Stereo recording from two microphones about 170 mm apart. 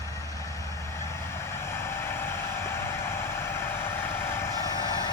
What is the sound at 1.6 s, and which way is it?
Vehicle, 15° left (ahead or behind).